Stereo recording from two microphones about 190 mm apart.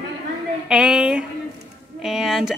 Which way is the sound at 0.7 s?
5° right (ahead or behind).